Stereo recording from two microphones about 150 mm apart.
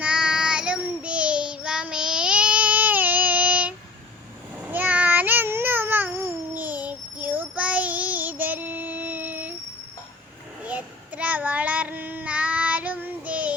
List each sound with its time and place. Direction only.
0.0 s child singing: 5° right (ahead or behind)
10.6 s child singing: 10° right (ahead or behind)